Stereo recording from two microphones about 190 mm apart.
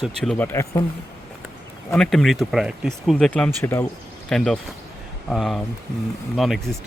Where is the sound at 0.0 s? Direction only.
5° left (ahead or behind).